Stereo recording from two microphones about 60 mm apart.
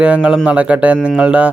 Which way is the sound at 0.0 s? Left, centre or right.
Centre.